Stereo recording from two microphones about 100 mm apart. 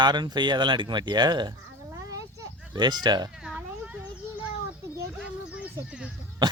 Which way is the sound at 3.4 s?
10° right (ahead or behind).